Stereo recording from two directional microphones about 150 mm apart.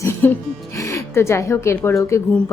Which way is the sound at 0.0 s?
15° left (ahead or behind).